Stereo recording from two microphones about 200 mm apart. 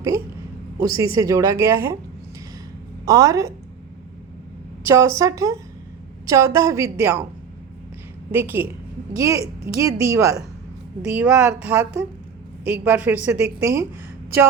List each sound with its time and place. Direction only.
0.8 s a woman's voice: 15° right (ahead or behind)
3.1 s a woman's voice: 15° right (ahead or behind)
4.9 s a woman's voice: 15° right (ahead or behind)
8.3 s a woman's voice: 10° right (ahead or behind)